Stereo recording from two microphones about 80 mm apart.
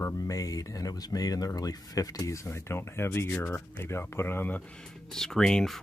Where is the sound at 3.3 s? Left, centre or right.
Centre.